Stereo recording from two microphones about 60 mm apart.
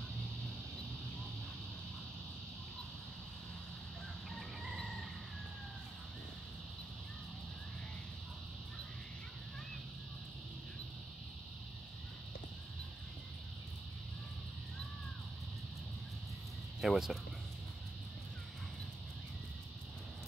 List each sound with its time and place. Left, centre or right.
4.3 s chicken: centre
16.8 s speech: centre